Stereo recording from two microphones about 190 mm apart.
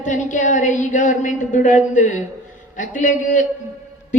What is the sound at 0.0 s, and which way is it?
A woman's voice, 40° left (ahead or behind).